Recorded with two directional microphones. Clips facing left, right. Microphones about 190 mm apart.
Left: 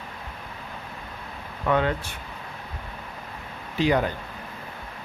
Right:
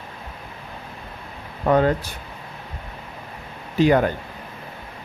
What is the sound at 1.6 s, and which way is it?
Speech, 40° right (ahead or behind).